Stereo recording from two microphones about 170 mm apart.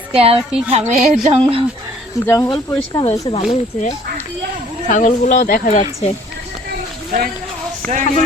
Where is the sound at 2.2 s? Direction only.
15° left (ahead or behind).